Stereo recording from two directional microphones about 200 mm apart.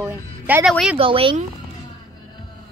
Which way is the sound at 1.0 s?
25° right (ahead or behind).